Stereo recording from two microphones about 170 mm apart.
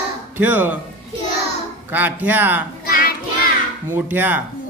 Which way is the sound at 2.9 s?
55° left (ahead or behind).